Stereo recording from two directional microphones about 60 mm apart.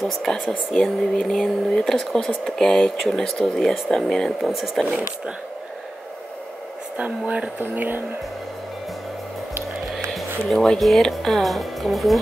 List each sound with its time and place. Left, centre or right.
0.0 s speech: centre
7.0 s speech: centre
7.6 s speech: right
10.1 s speech: centre